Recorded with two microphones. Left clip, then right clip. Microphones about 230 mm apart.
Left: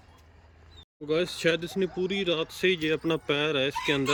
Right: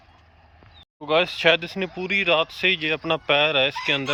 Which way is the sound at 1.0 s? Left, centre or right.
Centre.